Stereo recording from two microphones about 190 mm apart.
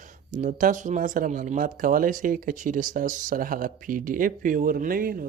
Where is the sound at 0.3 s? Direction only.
40° right (ahead or behind).